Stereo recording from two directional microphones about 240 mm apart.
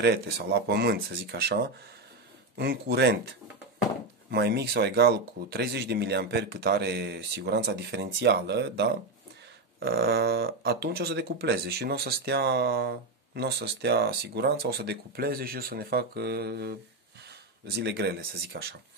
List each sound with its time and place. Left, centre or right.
0.0 s speech: right
4.3 s speech: right